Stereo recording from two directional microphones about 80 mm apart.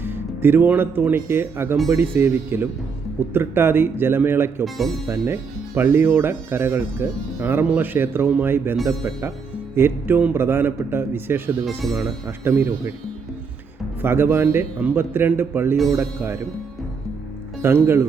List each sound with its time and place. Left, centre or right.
0.0 s speech: right
4.6 s speech: centre
5.0 s speech: right
9.7 s speech: right
11.8 s speech: centre
12.5 s speech: right
14.0 s speech: right
17.6 s speech: right